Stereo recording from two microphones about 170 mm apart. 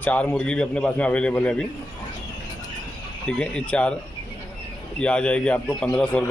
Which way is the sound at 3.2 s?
5° left (ahead or behind).